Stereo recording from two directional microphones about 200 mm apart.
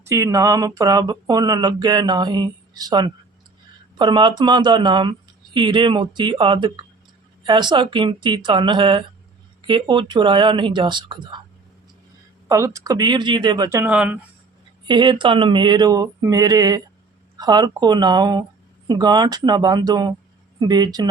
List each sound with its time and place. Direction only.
0.0 s speech: 15° right (ahead or behind)
12.5 s speech: 15° right (ahead or behind)
14.8 s speech: 25° right (ahead or behind)